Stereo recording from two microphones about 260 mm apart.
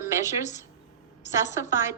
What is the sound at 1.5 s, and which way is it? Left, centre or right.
Speech, centre.